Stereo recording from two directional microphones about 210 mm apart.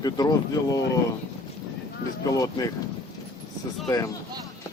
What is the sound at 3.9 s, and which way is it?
Speech, 15° left (ahead or behind).